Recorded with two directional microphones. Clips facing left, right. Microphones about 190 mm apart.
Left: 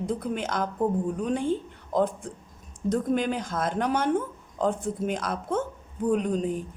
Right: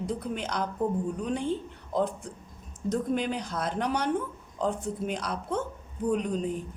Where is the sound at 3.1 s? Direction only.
50° left (ahead or behind).